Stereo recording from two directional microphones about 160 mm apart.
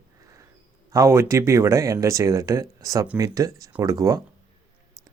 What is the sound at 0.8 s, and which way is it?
Speech, 20° right (ahead or behind).